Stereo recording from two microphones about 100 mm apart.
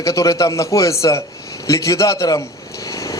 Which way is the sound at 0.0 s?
35° left (ahead or behind).